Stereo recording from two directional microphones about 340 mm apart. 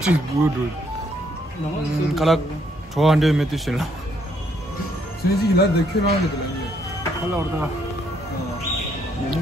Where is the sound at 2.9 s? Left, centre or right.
Centre.